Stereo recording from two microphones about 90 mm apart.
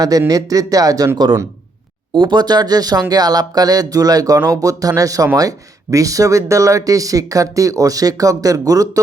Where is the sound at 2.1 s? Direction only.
55° right (ahead or behind).